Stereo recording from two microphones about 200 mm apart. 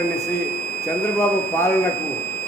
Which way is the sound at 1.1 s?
10° left (ahead or behind).